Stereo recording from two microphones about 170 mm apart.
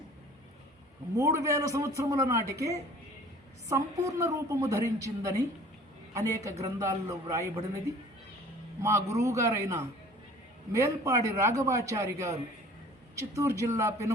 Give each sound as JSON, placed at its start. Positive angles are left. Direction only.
{"t": 1.1, "sound": "a man's voice", "side_deg": -20}
{"t": 4.0, "sound": "a woman's voice", "side_deg": -20}